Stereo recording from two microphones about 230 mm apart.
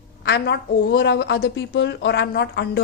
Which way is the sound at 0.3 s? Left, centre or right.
Left.